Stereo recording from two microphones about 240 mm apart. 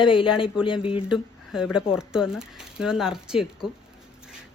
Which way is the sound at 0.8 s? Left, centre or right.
Left.